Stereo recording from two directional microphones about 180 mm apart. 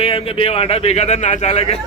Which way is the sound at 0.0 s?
30° left (ahead or behind).